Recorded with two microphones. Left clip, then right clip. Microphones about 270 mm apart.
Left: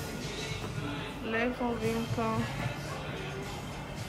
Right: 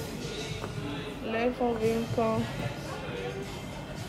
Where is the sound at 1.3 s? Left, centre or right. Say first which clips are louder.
Right 3 dB; centre.